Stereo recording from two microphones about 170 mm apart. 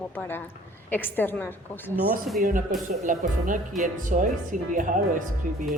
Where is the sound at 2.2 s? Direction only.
Centre (ahead or behind).